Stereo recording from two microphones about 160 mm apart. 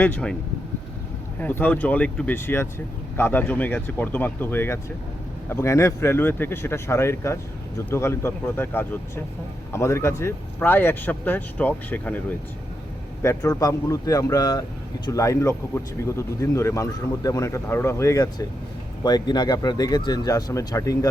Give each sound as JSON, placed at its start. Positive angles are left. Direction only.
{"t": 0.0, "sound": "speech", "side_deg": 10}
{"t": 1.4, "sound": "speech", "side_deg": 10}
{"t": 13.2, "sound": "speech", "side_deg": 20}